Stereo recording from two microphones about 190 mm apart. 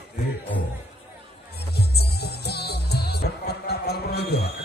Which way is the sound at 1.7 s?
60° left (ahead or behind).